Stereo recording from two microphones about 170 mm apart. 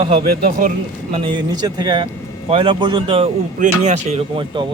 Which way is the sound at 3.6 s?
40° right (ahead or behind).